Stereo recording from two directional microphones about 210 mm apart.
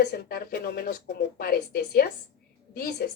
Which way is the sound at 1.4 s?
45° left (ahead or behind).